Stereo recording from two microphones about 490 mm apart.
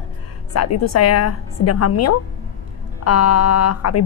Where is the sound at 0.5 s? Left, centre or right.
Left.